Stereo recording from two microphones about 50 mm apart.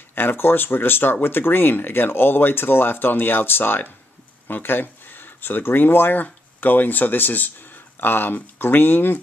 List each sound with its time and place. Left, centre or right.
0.1 s speech: left